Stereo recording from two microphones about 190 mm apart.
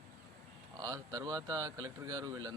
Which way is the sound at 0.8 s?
20° right (ahead or behind).